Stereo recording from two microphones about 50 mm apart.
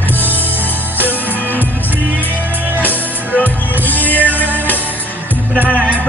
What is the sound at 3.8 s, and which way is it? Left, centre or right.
Music, left.